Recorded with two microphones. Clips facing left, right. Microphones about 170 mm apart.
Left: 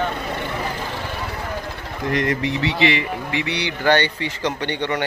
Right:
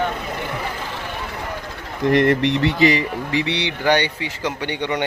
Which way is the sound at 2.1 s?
65° right (ahead or behind).